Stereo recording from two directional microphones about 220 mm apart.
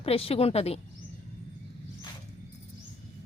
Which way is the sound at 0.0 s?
25° left (ahead or behind).